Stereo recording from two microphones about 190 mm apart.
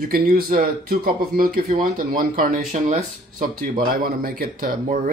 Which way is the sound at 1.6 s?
35° right (ahead or behind).